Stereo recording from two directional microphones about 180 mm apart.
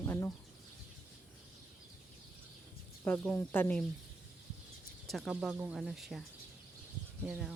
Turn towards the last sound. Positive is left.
turn(degrees=-10)  # may be behind; listen again after turning